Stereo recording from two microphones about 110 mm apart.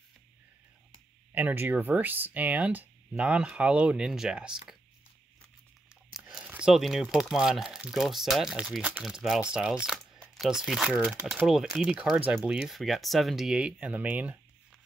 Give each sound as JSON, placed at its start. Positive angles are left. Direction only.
{"t": 1.3, "sound": "speech", "side_deg": -20}
{"t": 6.1, "sound": "speech", "side_deg": -10}